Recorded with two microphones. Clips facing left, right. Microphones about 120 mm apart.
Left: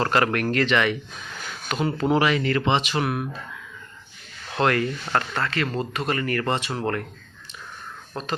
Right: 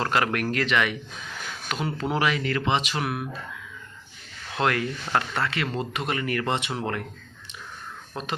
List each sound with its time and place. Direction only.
0.0 s speech: 5° right (ahead or behind)
4.5 s speech: 5° right (ahead or behind)
8.1 s speech: 10° right (ahead or behind)